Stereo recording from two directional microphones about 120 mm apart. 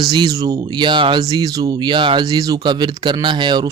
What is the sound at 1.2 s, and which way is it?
Speech, 30° right (ahead or behind).